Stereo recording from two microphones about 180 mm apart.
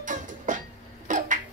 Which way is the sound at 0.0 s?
45° right (ahead or behind).